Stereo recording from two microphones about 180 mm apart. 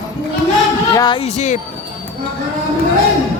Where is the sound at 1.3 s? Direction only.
40° left (ahead or behind).